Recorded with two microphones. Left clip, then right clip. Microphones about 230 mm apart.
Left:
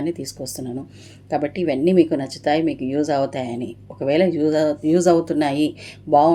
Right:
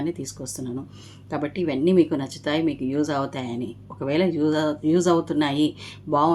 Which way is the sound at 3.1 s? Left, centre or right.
Right.